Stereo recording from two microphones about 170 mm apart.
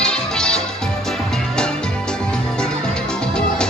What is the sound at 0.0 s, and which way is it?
Music, 5° left (ahead or behind).